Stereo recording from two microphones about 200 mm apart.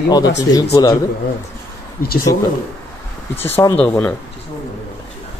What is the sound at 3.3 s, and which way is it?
Speech, 15° left (ahead or behind).